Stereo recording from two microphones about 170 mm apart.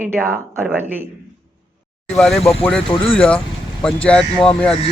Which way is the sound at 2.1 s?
Centre (ahead or behind).